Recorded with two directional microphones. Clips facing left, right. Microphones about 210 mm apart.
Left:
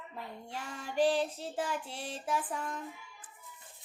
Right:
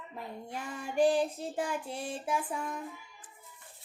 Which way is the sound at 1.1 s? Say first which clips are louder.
Right 2 dB; 50° right (ahead or behind).